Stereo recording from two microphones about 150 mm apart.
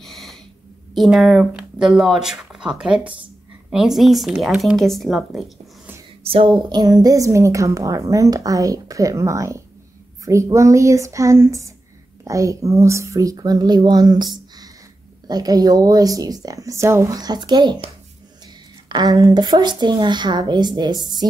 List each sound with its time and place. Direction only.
0.0 s a sound: centre (ahead or behind)
0.9 s speech: centre (ahead or behind)
6.2 s speech: 40° right (ahead or behind)
6.7 s a woman's voice: 25° right (ahead or behind)
18.9 s a woman's voice: 25° right (ahead or behind)